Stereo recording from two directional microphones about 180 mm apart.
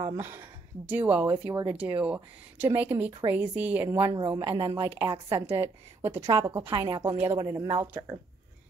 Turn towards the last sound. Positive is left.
turn(degrees=-20)  # may be behind; listen again after turning